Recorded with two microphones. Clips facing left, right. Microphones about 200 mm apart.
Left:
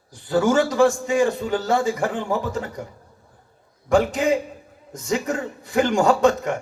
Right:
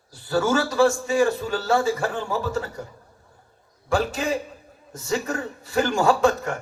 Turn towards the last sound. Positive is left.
turn(degrees=15)  # may be behind; listen again after turning